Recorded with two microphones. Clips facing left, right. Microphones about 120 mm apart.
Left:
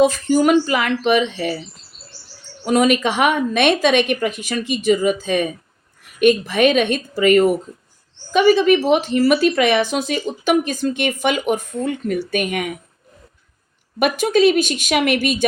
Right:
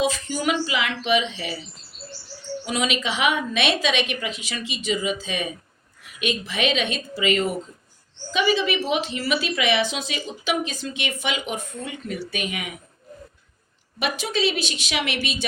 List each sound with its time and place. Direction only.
0.0 s a woman's voice: 45° left (ahead or behind)
2.6 s a woman's voice: 50° left (ahead or behind)
14.0 s a woman's voice: 50° left (ahead or behind)